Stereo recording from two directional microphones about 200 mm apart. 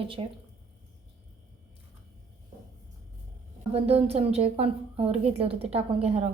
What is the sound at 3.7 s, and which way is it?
A woman's voice, 30° right (ahead or behind).